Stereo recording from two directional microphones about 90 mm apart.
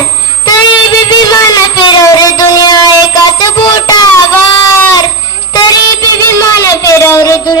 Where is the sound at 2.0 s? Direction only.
45° left (ahead or behind).